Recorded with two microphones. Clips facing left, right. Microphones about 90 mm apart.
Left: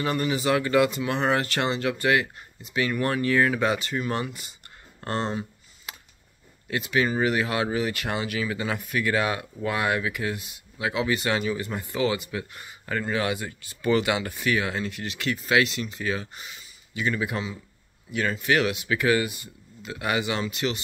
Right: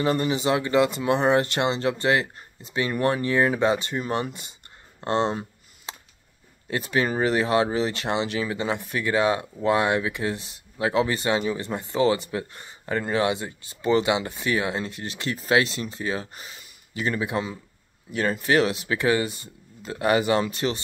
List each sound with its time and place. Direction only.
0.0 s speech: 30° right (ahead or behind)
5.9 s a sound: 30° right (ahead or behind)
6.7 s speech: 35° right (ahead or behind)
18.4 s speech: 35° right (ahead or behind)